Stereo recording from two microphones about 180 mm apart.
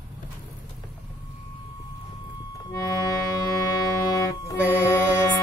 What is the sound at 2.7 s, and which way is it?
Accordion, 20° left (ahead or behind).